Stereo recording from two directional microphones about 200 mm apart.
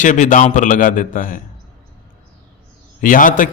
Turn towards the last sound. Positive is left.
turn(degrees=40)  # may be behind; listen again after turning